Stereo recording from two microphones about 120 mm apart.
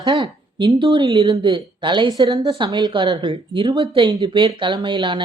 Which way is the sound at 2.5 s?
40° right (ahead or behind).